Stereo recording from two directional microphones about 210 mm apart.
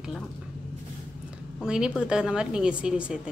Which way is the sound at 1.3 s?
5° right (ahead or behind).